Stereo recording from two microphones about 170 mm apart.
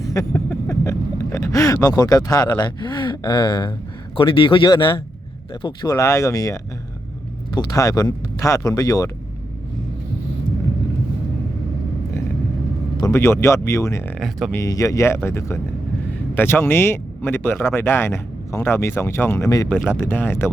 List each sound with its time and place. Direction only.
0.0 s vehicle: 20° left (ahead or behind)
4.2 s speech: 30° left (ahead or behind)
13.0 s speech: 15° left (ahead or behind)
14.2 s speech: centre (ahead or behind)
14.5 s speech: 20° left (ahead or behind)